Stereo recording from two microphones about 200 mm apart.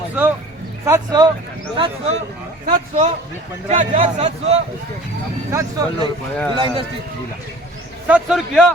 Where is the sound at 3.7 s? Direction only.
35° right (ahead or behind).